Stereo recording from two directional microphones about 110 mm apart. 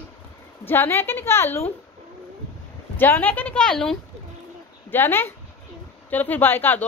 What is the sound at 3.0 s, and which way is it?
Speech, 15° left (ahead or behind).